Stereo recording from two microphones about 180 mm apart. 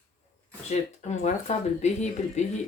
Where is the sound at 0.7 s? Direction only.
40° left (ahead or behind).